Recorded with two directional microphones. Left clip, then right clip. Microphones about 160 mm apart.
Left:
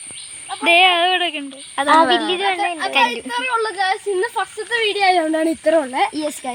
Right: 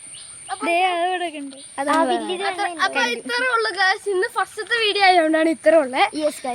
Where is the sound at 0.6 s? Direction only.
5° right (ahead or behind).